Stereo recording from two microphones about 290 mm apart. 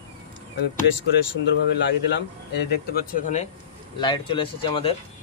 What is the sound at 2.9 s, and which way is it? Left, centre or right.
Speech, left.